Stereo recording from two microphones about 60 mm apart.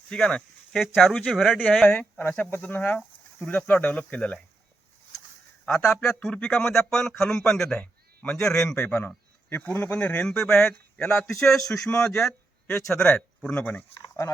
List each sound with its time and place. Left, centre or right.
0.1 s speech: centre
0.8 s speech: centre
2.0 s speech: left
5.6 s speech: centre
8.9 s speech: left
10.2 s speech: centre
10.7 s speech: centre
13.6 s speech: left